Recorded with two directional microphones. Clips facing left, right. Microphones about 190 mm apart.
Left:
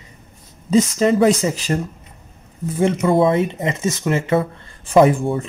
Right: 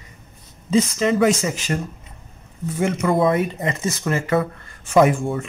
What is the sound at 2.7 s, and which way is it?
Speech, 30° left (ahead or behind).